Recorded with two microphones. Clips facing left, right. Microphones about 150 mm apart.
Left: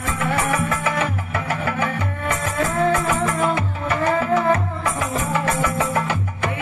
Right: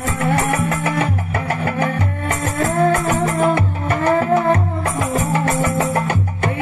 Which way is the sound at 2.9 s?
50° right (ahead or behind).